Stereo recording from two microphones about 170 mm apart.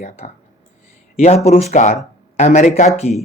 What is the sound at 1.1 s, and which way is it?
Speech, 35° left (ahead or behind).